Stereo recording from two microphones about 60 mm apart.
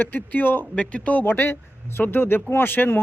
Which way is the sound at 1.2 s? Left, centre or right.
Left.